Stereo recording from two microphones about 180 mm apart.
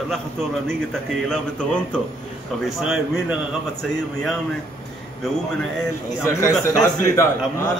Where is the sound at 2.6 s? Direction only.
5° right (ahead or behind).